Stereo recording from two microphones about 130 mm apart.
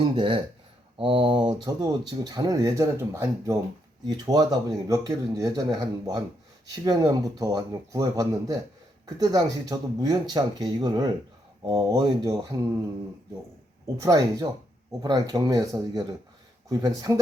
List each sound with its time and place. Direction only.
0.0 s a man's voice: 40° right (ahead or behind)
14.0 s a man's voice: 30° right (ahead or behind)